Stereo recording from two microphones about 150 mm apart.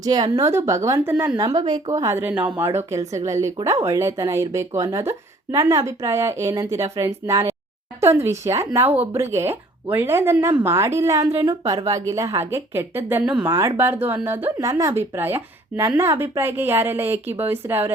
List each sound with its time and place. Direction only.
0.0 s speech: 25° right (ahead or behind)
11.3 s speech: 40° right (ahead or behind)
11.6 s speech: 25° right (ahead or behind)